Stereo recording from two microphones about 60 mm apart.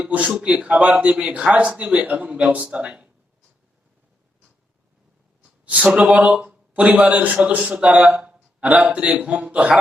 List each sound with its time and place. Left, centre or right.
0.0 s a man's voice: right
6.0 s speech: right